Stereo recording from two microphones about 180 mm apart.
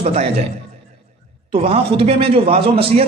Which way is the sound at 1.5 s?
30° right (ahead or behind).